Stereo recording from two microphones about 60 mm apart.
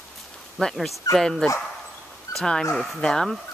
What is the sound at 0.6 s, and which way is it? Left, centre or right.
Speech, centre.